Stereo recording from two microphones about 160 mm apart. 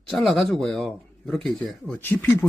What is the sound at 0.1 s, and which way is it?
Speech, centre (ahead or behind).